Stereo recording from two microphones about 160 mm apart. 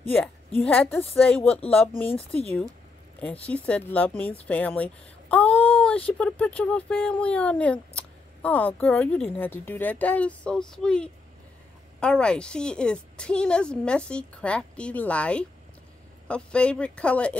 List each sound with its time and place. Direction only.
0.7 s speech: 10° left (ahead or behind)
2.0 s speech: 35° left (ahead or behind)
3.4 s a woman's voice: 10° left (ahead or behind)